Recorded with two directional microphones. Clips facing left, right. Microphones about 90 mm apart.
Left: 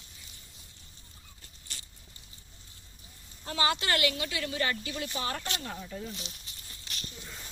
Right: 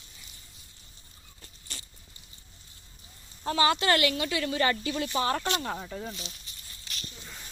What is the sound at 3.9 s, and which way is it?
A woman's voice, 60° right (ahead or behind).